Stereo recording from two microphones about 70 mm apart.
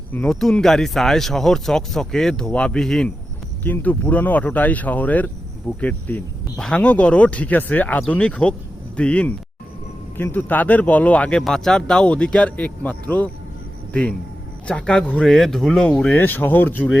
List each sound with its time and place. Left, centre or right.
0.2 s speech: centre
3.6 s speech: left
6.6 s speech: centre
6.8 s speech: centre
10.3 s speech: left
16.1 s speech: left